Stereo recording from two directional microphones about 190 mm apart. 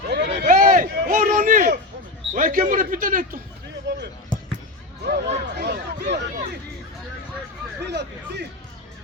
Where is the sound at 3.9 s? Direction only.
70° right (ahead or behind).